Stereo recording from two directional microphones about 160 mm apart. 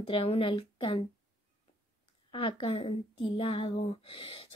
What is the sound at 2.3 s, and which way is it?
A woman's voice, 35° left (ahead or behind).